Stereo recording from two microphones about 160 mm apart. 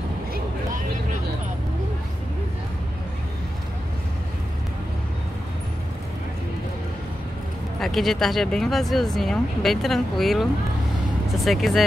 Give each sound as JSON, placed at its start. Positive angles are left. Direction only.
{"t": 7.8, "sound": "speech", "side_deg": 0}